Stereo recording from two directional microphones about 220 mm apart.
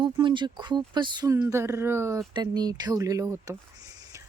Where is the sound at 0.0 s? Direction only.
20° right (ahead or behind).